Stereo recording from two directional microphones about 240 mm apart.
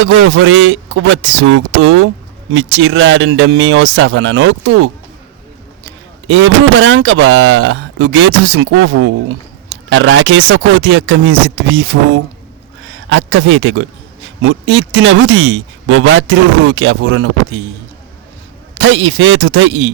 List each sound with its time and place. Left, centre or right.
0.0 s speech: right
18.8 s speech: right